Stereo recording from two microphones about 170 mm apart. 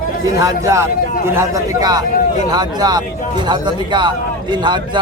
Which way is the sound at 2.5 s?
25° right (ahead or behind).